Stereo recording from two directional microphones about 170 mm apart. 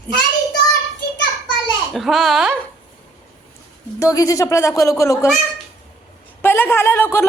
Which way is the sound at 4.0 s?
20° left (ahead or behind).